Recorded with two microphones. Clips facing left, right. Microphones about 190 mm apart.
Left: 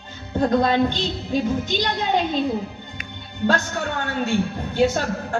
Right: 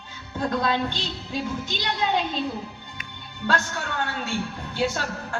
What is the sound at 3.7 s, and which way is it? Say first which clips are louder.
A woman's voice: left 4 dB; 50° left (ahead or behind).